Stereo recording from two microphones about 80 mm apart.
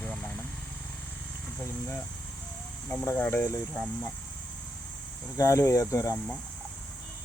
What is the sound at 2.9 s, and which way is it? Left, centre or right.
Speech, left.